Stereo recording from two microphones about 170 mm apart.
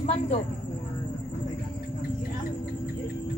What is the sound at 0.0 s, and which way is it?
Speech, 40° left (ahead or behind).